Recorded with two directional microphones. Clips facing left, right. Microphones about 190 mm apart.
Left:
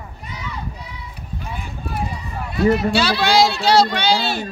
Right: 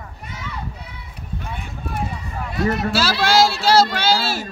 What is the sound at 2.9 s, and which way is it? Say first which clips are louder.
Speech: left 2 dB; centre (ahead or behind).